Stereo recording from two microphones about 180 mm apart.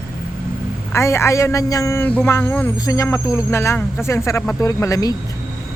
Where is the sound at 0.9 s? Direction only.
15° left (ahead or behind).